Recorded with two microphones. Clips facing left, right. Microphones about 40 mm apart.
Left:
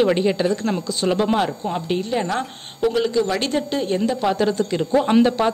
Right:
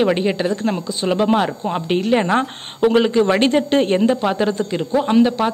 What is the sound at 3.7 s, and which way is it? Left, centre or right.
Speech, right.